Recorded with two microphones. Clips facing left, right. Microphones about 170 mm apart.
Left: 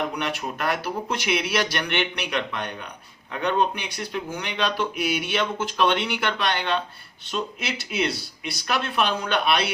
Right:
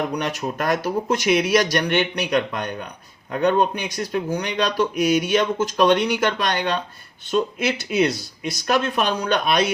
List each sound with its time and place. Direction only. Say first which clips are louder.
0.1 s speech: right 4 dB; 40° right (ahead or behind)